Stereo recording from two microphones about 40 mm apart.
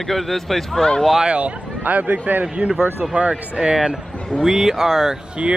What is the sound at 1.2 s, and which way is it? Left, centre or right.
Speech, right.